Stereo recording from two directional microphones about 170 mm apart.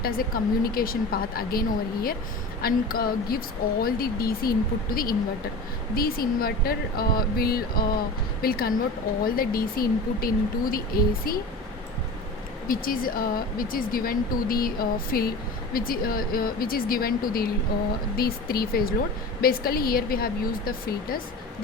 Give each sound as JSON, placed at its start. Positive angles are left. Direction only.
{"t": 0.0, "sound": "a woman's voice", "side_deg": 60}
{"t": 12.6, "sound": "a woman's voice", "side_deg": 55}